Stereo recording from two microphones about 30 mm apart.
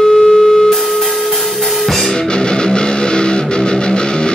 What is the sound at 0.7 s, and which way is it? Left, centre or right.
Music, centre.